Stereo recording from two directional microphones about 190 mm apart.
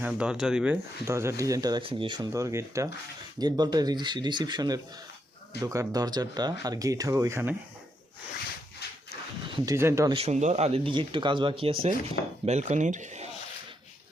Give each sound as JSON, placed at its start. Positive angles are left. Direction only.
{"t": 0.0, "sound": "speech", "side_deg": -5}
{"t": 9.5, "sound": "speech", "side_deg": -15}
{"t": 10.2, "sound": "speech", "side_deg": -35}